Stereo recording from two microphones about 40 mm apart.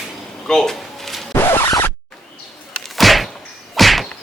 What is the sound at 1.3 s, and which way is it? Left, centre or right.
Zipper, left.